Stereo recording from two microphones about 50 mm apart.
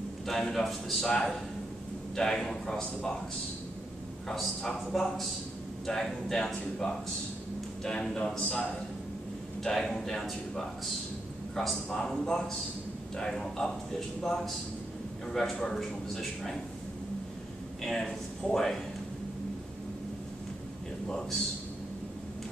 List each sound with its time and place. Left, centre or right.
0.3 s a man's voice: centre
2.1 s a man's voice: centre
2.8 s speech: left
4.6 s a man's voice: centre; by 8.6 s left
9.6 s a man's voice: centre
17.8 s a man's voice: centre